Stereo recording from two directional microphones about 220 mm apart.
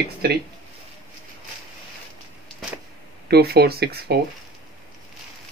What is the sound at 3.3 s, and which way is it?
Speech, 45° right (ahead or behind).